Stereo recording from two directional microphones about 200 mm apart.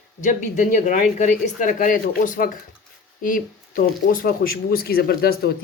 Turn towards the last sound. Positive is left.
turn(degrees=50)  # may be behind; listen again after turning